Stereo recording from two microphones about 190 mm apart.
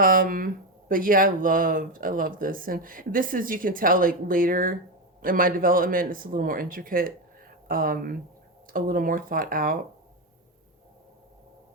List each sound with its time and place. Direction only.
0.0 s speech: 45° right (ahead or behind)